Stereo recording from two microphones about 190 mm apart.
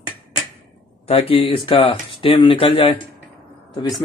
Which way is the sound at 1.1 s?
30° left (ahead or behind).